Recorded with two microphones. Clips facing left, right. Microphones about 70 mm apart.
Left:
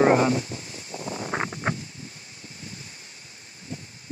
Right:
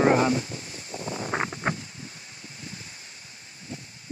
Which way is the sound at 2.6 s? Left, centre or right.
Right.